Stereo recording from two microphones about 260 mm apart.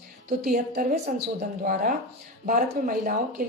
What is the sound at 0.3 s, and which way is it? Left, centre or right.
Speech, right.